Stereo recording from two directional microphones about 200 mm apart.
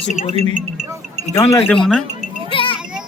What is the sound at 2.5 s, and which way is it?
Children playing, 25° left (ahead or behind).